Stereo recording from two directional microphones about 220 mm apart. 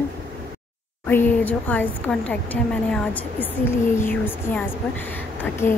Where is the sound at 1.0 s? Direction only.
10° left (ahead or behind).